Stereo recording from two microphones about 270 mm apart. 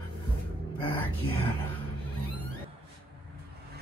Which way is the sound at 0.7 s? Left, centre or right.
Centre.